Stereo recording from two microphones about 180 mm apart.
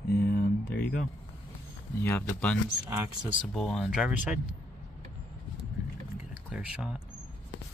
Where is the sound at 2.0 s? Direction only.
10° left (ahead or behind).